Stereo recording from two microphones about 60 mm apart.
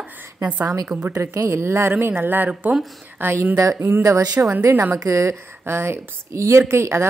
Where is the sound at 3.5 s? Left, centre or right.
Right.